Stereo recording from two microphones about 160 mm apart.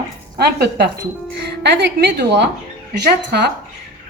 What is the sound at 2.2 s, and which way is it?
Speech, 90° right.